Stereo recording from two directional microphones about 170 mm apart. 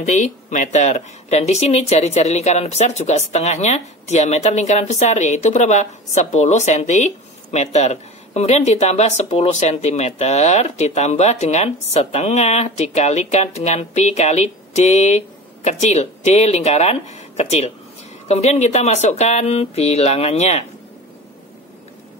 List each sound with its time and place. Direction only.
0.0 s speech: 45° left (ahead or behind)